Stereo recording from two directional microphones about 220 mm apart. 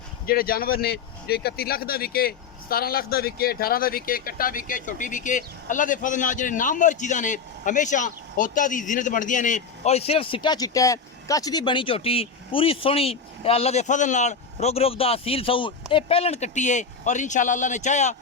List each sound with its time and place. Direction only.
0.3 s speech: 40° left (ahead or behind)